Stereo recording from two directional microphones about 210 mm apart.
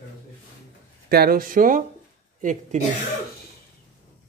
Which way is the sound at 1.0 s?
45° right (ahead or behind).